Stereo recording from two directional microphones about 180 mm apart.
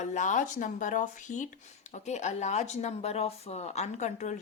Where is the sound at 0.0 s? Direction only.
40° left (ahead or behind).